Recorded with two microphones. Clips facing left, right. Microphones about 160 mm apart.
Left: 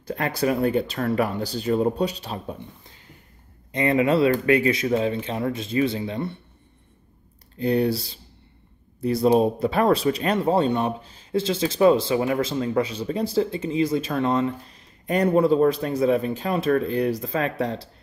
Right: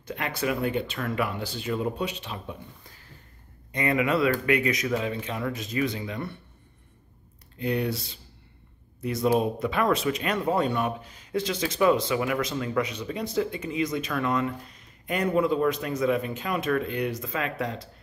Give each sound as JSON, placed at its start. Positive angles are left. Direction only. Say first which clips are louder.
{"t": 0.0, "sound": "speech", "louder": "left 5 dB", "side_deg": 35}
{"t": 3.7, "sound": "speech", "louder": "left 5 dB", "side_deg": 30}
{"t": 7.5, "sound": "speech", "louder": "left 6 dB", "side_deg": 35}